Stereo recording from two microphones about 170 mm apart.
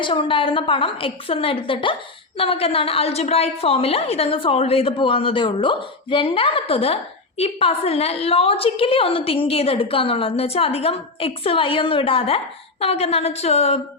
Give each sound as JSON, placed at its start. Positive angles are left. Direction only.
{"t": 0.0, "sound": "a woman's voice", "side_deg": 30}